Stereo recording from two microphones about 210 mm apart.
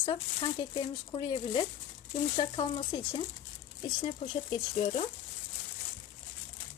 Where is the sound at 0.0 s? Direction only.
20° left (ahead or behind).